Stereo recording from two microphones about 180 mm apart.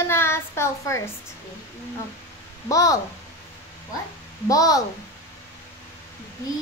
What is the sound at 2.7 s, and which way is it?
Speech, 20° left (ahead or behind).